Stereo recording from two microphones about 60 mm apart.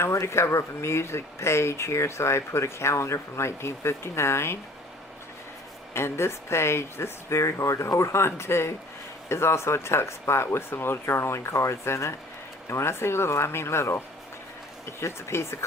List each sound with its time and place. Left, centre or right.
0.0 s speech: left
5.9 s speech: left
15.0 s speech: left